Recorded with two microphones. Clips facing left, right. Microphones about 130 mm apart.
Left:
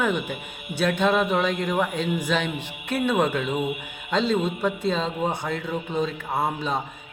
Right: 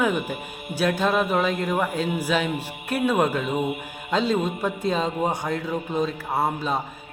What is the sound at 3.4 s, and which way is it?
Speech, 40° right (ahead or behind).